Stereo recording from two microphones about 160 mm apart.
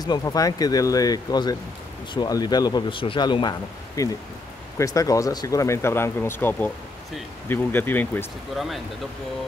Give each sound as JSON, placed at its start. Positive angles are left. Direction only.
{"t": 0.0, "sound": "speech", "side_deg": 25}
{"t": 8.5, "sound": "speech", "side_deg": 0}